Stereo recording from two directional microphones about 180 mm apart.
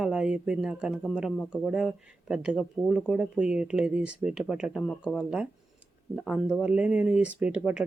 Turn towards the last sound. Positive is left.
turn(degrees=-5)  # may be behind; listen again after turning